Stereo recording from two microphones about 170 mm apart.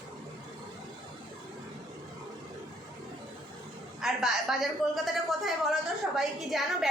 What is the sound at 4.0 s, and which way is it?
A woman's voice, centre (ahead or behind).